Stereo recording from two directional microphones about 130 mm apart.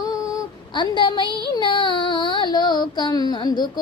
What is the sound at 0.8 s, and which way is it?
Child singing, 35° left (ahead or behind).